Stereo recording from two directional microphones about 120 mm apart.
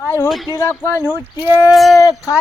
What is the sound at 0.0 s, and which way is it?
Speech, 25° left (ahead or behind).